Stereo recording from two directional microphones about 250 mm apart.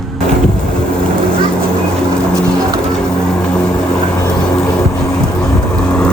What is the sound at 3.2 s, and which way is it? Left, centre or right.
Vehicle, centre.